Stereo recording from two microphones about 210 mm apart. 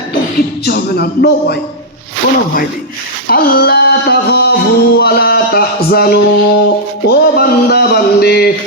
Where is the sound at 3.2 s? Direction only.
45° left (ahead or behind).